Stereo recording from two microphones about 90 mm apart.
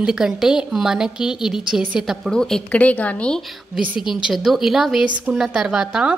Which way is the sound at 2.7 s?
15° left (ahead or behind).